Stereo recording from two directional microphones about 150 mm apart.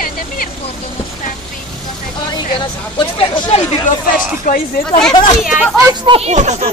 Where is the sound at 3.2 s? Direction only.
40° left (ahead or behind).